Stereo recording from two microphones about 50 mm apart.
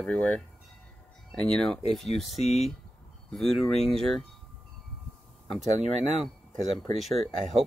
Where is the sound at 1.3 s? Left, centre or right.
Centre.